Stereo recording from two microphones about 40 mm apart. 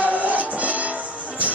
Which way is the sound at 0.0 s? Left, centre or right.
Right.